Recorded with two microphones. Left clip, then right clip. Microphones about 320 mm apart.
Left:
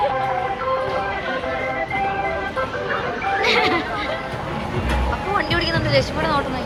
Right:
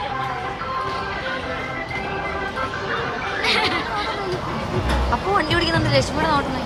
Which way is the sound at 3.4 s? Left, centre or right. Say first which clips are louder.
Left 2 dB; centre.